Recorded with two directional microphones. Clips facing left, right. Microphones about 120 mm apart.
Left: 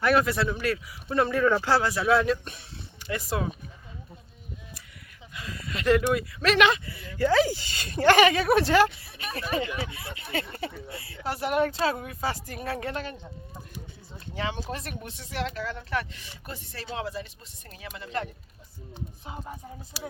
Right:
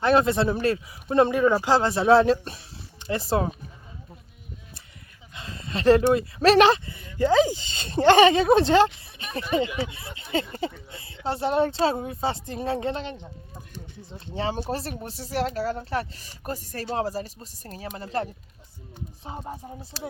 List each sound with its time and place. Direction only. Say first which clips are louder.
0.0 s speech: right 3 dB; 25° right (ahead or behind)
5.3 s speech: right 3 dB; 25° right (ahead or behind)